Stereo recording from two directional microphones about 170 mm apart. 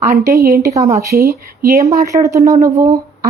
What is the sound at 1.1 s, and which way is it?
Speech, 65° right (ahead or behind).